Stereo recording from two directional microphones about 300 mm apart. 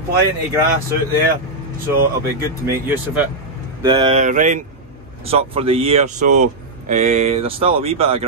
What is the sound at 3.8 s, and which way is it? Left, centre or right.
Speech, centre.